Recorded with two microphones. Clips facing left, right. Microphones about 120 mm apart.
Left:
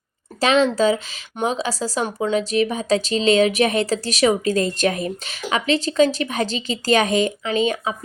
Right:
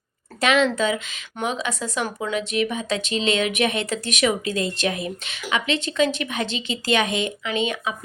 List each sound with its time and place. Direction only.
0.3 s speech: 30° left (ahead or behind)